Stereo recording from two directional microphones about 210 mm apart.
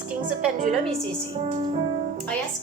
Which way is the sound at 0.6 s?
30° right (ahead or behind).